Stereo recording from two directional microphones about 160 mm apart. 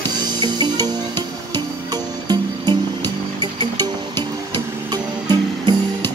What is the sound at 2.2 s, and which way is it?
Music, 25° right (ahead or behind).